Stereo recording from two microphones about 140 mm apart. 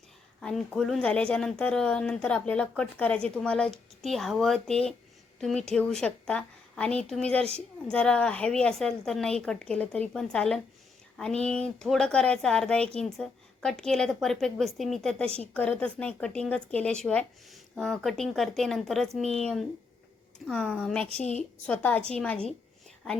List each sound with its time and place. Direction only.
0.4 s a woman's voice: 5° left (ahead or behind)
21.2 s a woman's voice: 55° left (ahead or behind)
21.7 s a woman's voice: 10° left (ahead or behind)